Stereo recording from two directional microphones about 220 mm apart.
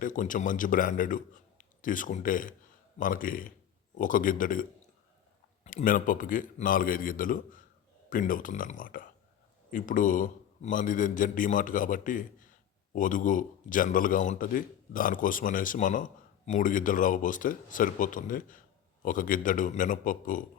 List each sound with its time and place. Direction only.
0.0 s a man's voice: 35° left (ahead or behind)
5.6 s a man's voice: 40° left (ahead or behind)